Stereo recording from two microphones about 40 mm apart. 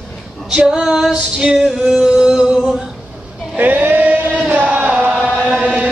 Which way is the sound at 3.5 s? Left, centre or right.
Right.